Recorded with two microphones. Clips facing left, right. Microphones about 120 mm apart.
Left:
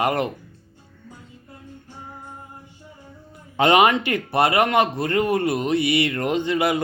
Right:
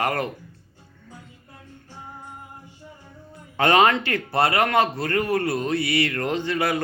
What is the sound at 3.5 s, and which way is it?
Speech, 20° left (ahead or behind).